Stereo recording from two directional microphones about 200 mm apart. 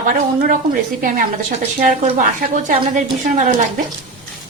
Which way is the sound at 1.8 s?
45° right (ahead or behind).